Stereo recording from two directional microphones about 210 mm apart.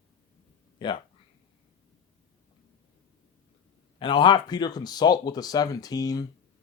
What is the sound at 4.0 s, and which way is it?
Speech, 20° left (ahead or behind).